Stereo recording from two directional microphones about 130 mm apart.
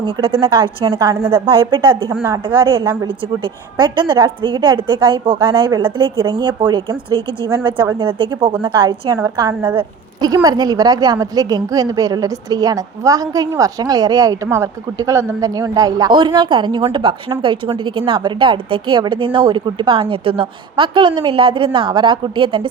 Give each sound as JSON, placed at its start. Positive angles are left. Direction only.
{"t": 0.0, "sound": "a woman's voice", "side_deg": -45}
{"t": 1.1, "sound": "a woman's voice", "side_deg": -20}
{"t": 1.5, "sound": "a woman's voice", "side_deg": -40}
{"t": 9.1, "sound": "a woman's voice", "side_deg": -20}
{"t": 10.2, "sound": "a woman's voice", "side_deg": -30}